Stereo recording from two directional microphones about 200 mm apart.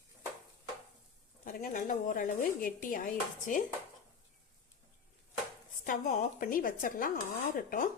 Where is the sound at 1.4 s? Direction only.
40° left (ahead or behind).